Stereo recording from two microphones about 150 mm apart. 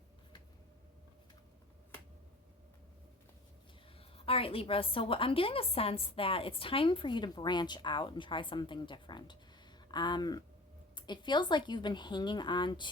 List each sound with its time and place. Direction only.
4.2 s a woman's voice: 40° left (ahead or behind)